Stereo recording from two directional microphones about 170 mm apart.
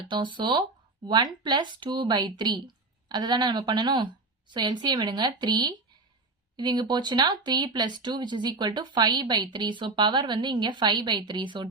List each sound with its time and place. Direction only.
0.0 s speech: 25° right (ahead or behind)